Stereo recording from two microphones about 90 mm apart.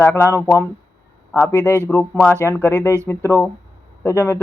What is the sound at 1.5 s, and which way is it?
Speech, 30° right (ahead or behind).